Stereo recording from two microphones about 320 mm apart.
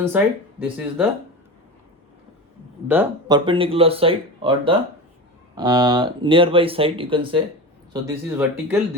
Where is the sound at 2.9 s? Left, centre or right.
Centre.